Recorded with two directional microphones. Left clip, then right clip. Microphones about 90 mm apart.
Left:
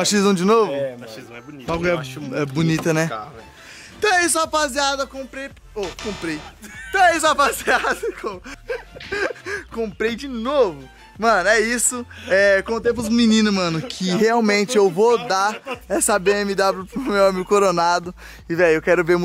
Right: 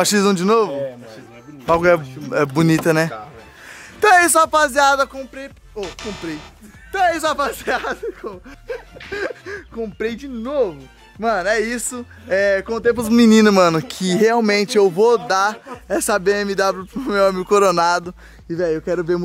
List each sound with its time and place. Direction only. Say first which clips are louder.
0.0 s a man's voice: right 2 dB; 25° right (ahead or behind)
0.3 s speech: even; 10° right (ahead or behind)
1.7 s speech: right 7 dB; 40° right (ahead or behind)
4.0 s speech: right 6 dB; 40° right (ahead or behind)
5.1 s speech: even; 10° right (ahead or behind)
5.8 s speech: left 1 dB; centre (ahead or behind)
12.8 s speech: right 4 dB; 30° right (ahead or behind)
14.2 s speech: right 2 dB; 15° right (ahead or behind)